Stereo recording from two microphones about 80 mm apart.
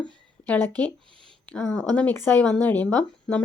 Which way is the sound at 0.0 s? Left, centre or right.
Left.